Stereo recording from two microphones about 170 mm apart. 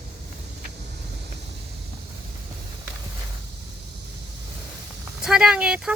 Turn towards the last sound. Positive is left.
turn(degrees=-5)  # may be behind; listen again after turning